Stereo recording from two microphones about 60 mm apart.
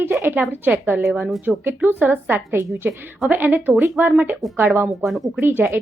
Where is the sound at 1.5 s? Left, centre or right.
Right.